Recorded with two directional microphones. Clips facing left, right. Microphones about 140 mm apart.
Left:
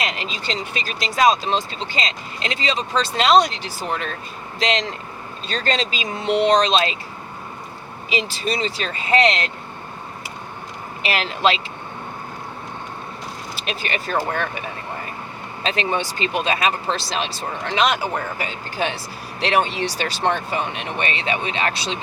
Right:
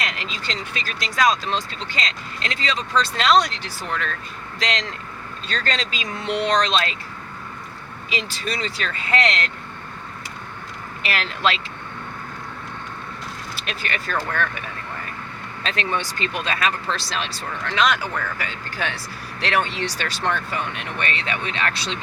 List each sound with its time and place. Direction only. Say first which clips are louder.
0.0 s speech: left 3 dB; 25° left (ahead or behind)
8.1 s speech: left 4 dB; 20° left (ahead or behind)
11.0 s speech: left 3 dB; 20° left (ahead or behind)
13.7 s speech: left 3 dB; 25° left (ahead or behind)